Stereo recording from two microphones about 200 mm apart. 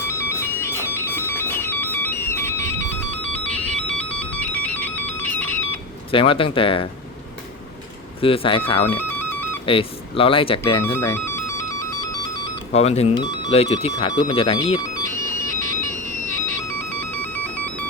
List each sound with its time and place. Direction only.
0.1 s music: 15° left (ahead or behind)
6.1 s speech: 25° left (ahead or behind)
8.2 s speech: 25° left (ahead or behind)
10.8 s music: 15° left (ahead or behind)
12.7 s speech: 30° left (ahead or behind)
15.0 s music: 15° left (ahead or behind)
17.3 s music: 5° left (ahead or behind)